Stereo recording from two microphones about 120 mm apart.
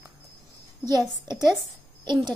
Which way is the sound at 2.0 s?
40° right (ahead or behind).